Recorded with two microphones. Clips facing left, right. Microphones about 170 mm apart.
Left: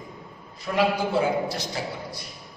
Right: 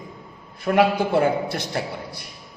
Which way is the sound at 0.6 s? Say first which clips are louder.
Right 5 dB; 60° right (ahead or behind).